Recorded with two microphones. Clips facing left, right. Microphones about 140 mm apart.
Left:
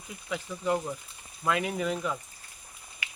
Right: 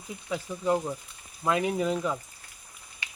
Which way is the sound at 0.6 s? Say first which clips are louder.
Right 2 dB; 15° right (ahead or behind).